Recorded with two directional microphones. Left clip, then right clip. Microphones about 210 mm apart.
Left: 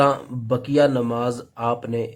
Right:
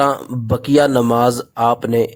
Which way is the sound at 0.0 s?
45° right (ahead or behind).